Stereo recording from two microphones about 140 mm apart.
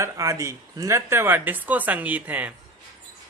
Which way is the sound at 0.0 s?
20° right (ahead or behind).